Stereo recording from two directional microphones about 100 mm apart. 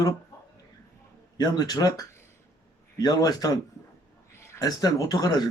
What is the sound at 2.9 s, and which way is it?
Speech, 40° left (ahead or behind).